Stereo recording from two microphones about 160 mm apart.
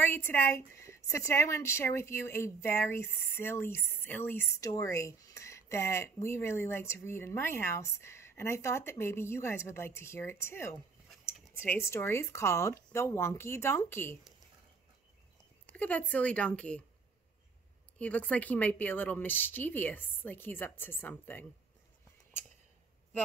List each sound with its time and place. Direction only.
0.0 s a woman's voice: 15° left (ahead or behind)
15.6 s a woman's voice: 10° left (ahead or behind)
17.9 s a woman's voice: 10° left (ahead or behind)